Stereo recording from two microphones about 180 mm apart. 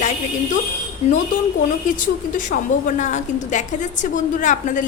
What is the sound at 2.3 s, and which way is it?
A woman's voice, 45° left (ahead or behind).